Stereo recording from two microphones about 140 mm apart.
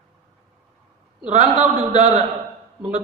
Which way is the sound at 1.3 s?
55° right (ahead or behind).